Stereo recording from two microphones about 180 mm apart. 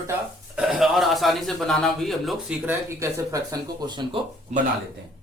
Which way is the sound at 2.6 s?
15° right (ahead or behind).